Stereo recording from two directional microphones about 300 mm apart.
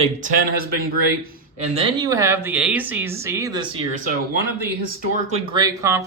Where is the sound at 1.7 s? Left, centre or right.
Centre.